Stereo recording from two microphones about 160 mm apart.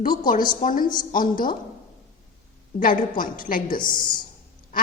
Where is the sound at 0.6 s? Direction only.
60° left (ahead or behind).